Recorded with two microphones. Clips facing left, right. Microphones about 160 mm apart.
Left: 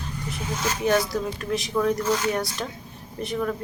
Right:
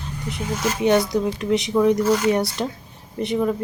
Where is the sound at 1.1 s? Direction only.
20° right (ahead or behind).